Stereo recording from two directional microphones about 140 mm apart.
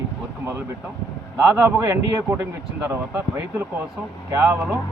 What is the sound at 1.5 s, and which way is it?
Speech, 20° right (ahead or behind).